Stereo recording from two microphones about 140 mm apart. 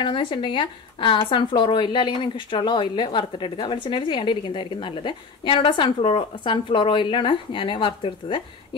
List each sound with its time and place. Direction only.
0.0 s speech: 35° left (ahead or behind)